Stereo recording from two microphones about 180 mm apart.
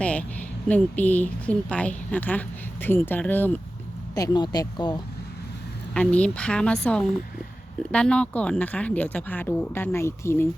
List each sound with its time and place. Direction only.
0.0 s a woman's voice: 5° left (ahead or behind)
4.1 s speech: 20° left (ahead or behind)
5.9 s a woman's voice: 5° left (ahead or behind)